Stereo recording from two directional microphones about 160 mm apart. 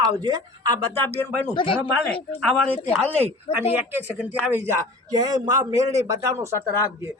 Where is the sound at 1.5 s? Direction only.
35° left (ahead or behind).